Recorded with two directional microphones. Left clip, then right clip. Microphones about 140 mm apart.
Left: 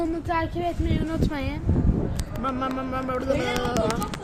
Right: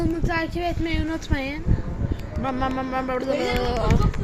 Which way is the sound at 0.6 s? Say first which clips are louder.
Right 1 dB; 25° right (ahead or behind).